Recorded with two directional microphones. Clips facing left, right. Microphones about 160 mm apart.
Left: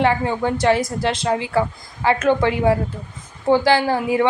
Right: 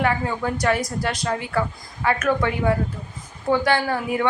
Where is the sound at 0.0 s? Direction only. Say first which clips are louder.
Left 4 dB; 30° left (ahead or behind).